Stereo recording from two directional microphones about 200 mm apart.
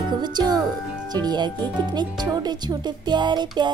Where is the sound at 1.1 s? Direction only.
20° right (ahead or behind).